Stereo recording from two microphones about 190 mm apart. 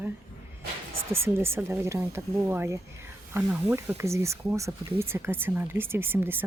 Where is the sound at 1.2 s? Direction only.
15° right (ahead or behind).